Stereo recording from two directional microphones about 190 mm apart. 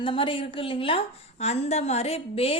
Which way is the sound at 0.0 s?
25° left (ahead or behind).